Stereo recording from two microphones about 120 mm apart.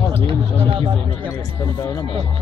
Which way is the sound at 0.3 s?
50° right (ahead or behind).